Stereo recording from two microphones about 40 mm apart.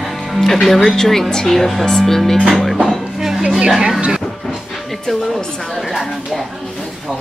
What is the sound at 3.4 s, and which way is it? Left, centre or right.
Speech, right.